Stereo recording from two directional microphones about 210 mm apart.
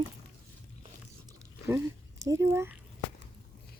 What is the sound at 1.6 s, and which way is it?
Speech, 15° right (ahead or behind).